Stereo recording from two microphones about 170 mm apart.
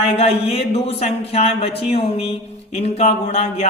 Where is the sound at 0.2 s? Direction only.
35° left (ahead or behind).